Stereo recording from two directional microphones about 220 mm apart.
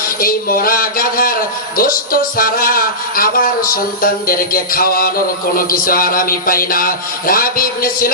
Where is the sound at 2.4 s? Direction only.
40° left (ahead or behind).